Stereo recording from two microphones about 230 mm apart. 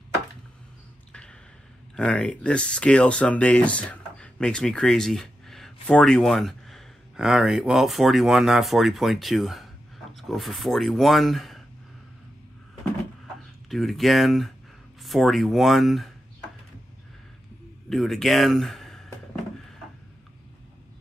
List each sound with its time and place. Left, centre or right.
2.0 s speech: centre
13.7 s speech: centre
17.8 s speech: centre